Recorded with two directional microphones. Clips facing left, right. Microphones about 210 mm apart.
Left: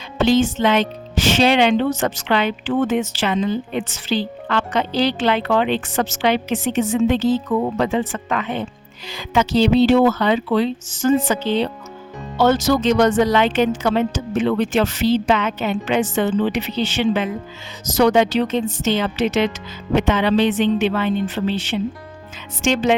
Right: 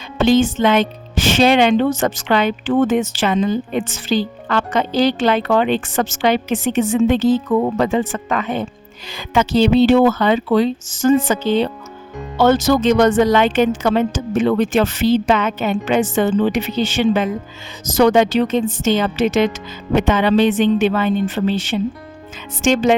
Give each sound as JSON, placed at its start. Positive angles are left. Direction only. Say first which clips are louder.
{"t": 0.3, "sound": "speech", "louder": "right 3 dB", "side_deg": -50}
{"t": 9.0, "sound": "speech", "louder": "right 1 dB", "side_deg": -55}